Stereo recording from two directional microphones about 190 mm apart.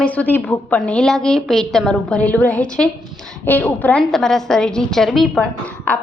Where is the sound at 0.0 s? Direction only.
5° left (ahead or behind).